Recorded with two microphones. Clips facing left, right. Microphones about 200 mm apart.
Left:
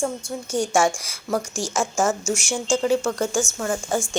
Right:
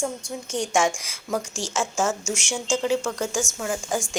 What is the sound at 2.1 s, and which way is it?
A woman's voice, 10° right (ahead or behind).